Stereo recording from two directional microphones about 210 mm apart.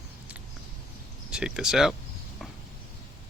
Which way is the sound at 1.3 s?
5° right (ahead or behind).